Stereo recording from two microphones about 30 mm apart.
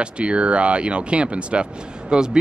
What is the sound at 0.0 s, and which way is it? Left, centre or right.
Speech, right.